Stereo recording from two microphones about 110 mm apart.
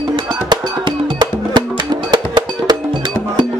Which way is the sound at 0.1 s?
40° right (ahead or behind).